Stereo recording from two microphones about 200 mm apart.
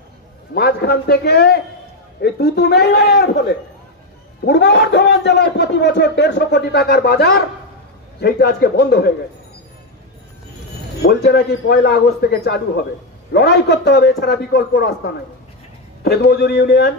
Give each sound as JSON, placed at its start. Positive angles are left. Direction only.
{"t": 0.6, "sound": "a man's voice", "side_deg": 50}
{"t": 11.0, "sound": "a man's voice", "side_deg": 55}